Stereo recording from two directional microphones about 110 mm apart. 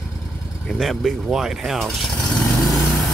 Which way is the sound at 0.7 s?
Centre (ahead or behind).